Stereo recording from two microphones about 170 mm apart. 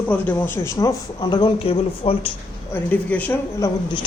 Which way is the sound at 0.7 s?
25° left (ahead or behind).